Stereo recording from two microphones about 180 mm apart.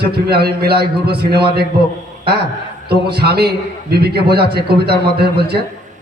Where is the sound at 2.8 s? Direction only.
60° right (ahead or behind).